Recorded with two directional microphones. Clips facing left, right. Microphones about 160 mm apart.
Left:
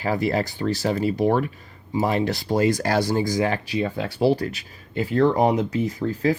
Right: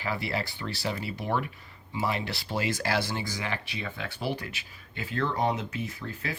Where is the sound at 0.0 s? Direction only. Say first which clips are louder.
Left 9 dB; 45° left (ahead or behind).